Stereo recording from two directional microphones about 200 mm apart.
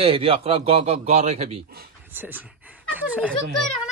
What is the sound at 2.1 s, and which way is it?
A man's voice, 10° right (ahead or behind).